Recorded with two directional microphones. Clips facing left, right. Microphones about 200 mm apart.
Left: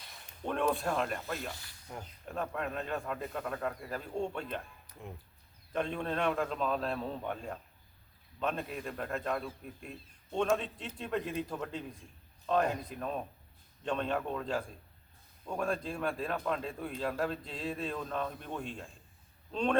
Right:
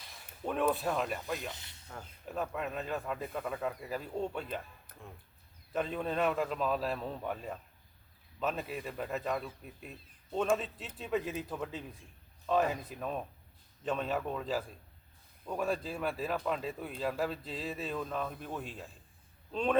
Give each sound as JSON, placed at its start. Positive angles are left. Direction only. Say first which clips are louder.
{"t": 0.4, "sound": "speech", "louder": "even", "side_deg": -5}
{"t": 1.4, "sound": "speech", "louder": "left 1 dB", "side_deg": -20}
{"t": 2.2, "sound": "speech", "louder": "even", "side_deg": -5}
{"t": 4.9, "sound": "a sound", "louder": "left 3 dB", "side_deg": -55}
{"t": 5.7, "sound": "a man's voice", "louder": "even", "side_deg": -5}